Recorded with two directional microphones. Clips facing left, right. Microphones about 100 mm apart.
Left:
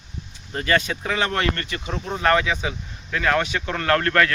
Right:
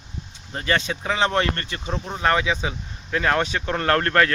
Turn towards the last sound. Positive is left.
turn(degrees=-30)  # may be behind; listen again after turning